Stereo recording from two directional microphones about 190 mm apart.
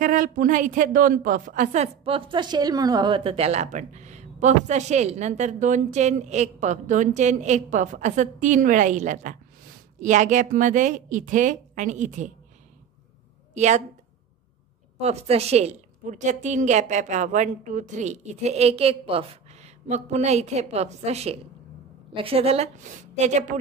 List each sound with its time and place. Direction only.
0.0 s a woman's voice: 45° right (ahead or behind)
13.6 s a woman's voice: 40° right (ahead or behind)
15.0 s a woman's voice: 35° right (ahead or behind)